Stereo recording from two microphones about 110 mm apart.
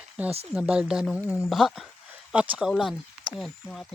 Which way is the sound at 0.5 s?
10° right (ahead or behind).